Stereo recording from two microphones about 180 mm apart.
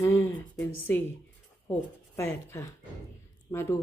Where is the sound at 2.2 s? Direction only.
15° left (ahead or behind).